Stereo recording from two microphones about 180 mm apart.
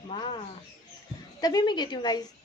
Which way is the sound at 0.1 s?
25° left (ahead or behind).